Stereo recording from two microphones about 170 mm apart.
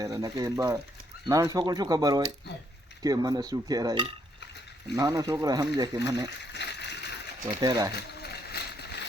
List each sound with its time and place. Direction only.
0.0 s speech: 20° right (ahead or behind)
6.5 s water: 90° left
7.4 s speech: 25° right (ahead or behind)
7.9 s splash: 70° left (ahead or behind)